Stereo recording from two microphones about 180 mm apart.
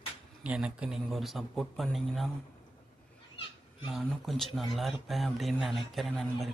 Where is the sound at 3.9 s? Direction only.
Centre (ahead or behind).